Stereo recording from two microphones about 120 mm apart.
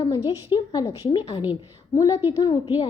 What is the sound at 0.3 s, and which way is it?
A woman's voice, 40° left (ahead or behind).